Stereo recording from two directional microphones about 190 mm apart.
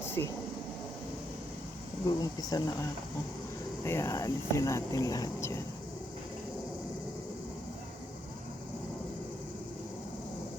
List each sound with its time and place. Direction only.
0.0 s air conditioning: 10° left (ahead or behind)
2.0 s speech: 20° left (ahead or behind)